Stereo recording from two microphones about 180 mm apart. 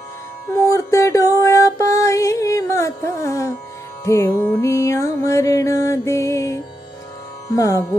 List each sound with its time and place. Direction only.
0.5 s music: 15° left (ahead or behind)